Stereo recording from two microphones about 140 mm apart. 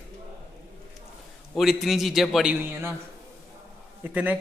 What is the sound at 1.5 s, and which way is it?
A man's voice, centre (ahead or behind).